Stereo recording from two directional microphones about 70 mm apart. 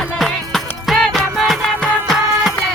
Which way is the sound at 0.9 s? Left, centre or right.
Centre.